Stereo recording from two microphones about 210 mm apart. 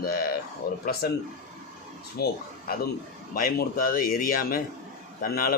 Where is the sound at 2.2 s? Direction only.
50° left (ahead or behind).